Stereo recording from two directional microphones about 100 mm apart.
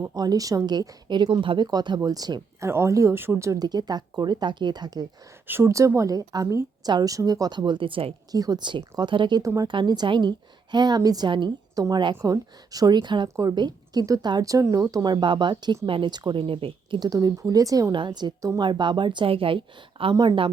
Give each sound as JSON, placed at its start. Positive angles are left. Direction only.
{"t": 0.0, "sound": "speech", "side_deg": -40}
{"t": 2.6, "sound": "speech", "side_deg": -25}
{"t": 3.6, "sound": "speech", "side_deg": -45}
{"t": 5.5, "sound": "speech", "side_deg": -25}
{"t": 8.3, "sound": "speech", "side_deg": -40}
{"t": 9.4, "sound": "speech", "side_deg": -35}
{"t": 9.6, "sound": "speech", "side_deg": -50}
{"t": 11.3, "sound": "speech", "side_deg": -50}
{"t": 13.2, "sound": "a woman's voice", "side_deg": -35}
{"t": 17.0, "sound": "speech", "side_deg": -40}
{"t": 17.9, "sound": "speech", "side_deg": -50}